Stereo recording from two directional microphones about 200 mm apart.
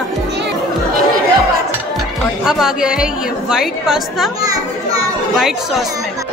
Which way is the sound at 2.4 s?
Centre (ahead or behind).